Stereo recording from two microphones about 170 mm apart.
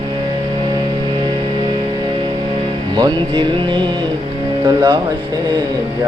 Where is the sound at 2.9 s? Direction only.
25° right (ahead or behind).